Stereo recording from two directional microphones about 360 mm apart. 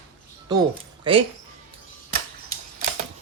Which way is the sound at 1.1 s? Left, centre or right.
Centre.